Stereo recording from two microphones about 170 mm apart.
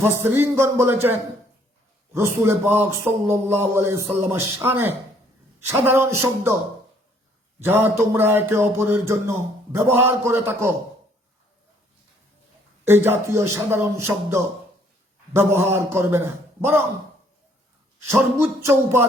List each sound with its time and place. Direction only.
0.0 s a man's voice: 15° right (ahead or behind)
2.1 s a man's voice: 15° right (ahead or behind)
7.6 s a man's voice: 15° right (ahead or behind)
12.8 s a man's voice: 15° right (ahead or behind)
18.3 s a man's voice: 15° right (ahead or behind)